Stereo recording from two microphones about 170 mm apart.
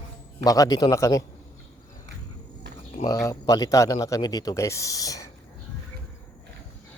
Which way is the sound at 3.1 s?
20° left (ahead or behind).